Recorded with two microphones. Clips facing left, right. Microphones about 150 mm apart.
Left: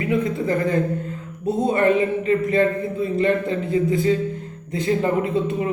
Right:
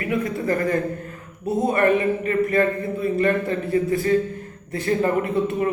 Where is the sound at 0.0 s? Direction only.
20° left (ahead or behind).